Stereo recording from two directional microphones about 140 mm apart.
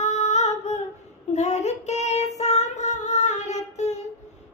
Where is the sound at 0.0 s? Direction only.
55° left (ahead or behind).